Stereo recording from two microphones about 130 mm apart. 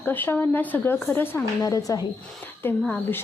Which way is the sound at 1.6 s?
25° left (ahead or behind).